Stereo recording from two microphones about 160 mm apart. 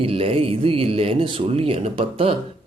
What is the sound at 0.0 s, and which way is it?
Speech, 35° right (ahead or behind).